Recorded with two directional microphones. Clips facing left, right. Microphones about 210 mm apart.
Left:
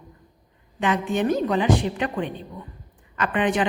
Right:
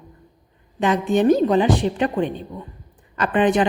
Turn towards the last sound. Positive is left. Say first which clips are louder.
# right 5 dB
turn(degrees=-35)  # may be behind; listen again after turning